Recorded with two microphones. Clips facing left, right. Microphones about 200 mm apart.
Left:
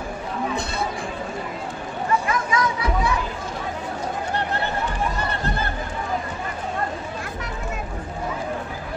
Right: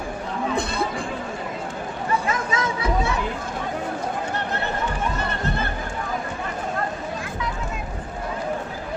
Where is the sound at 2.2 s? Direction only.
25° right (ahead or behind).